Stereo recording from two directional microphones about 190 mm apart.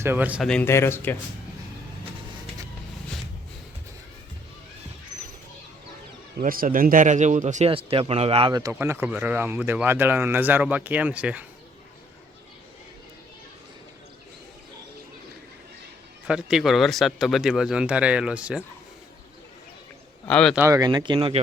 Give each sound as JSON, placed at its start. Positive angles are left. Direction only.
{"t": 0.0, "sound": "speech", "side_deg": -10}
{"t": 0.4, "sound": "a man's voice", "side_deg": 10}
{"t": 6.4, "sound": "speech", "side_deg": -50}
{"t": 16.2, "sound": "speech", "side_deg": -5}
{"t": 20.2, "sound": "speech", "side_deg": 5}
{"t": 20.6, "sound": "speech", "side_deg": -15}